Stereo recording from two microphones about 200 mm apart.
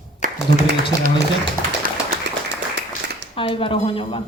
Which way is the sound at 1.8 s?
45° right (ahead or behind).